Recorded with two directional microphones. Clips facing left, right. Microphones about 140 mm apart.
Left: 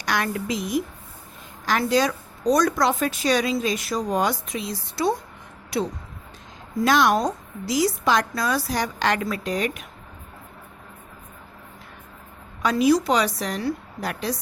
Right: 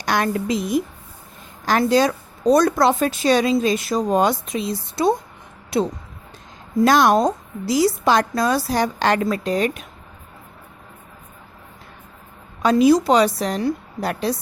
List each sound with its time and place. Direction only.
0.0 s a woman's voice: 30° right (ahead or behind)
6.8 s a woman's voice: 40° right (ahead or behind)
12.6 s a woman's voice: 30° right (ahead or behind)